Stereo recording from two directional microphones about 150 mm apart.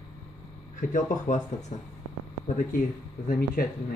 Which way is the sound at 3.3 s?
90° left.